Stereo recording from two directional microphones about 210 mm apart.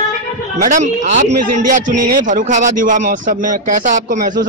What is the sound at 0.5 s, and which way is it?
Speech, 35° right (ahead or behind).